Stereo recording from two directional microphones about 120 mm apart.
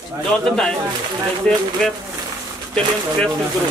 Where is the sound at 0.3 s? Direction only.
5° left (ahead or behind).